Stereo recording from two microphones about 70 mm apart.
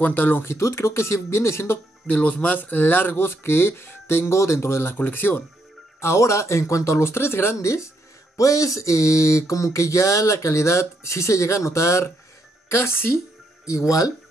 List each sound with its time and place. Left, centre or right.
0.0 s speech: left
2.0 s speech: left
5.9 s speech: left
8.4 s a sound: left
12.6 s speech: left
13.7 s a sound: left